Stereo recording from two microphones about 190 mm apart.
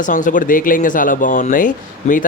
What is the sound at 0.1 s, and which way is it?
Speech, 45° left (ahead or behind).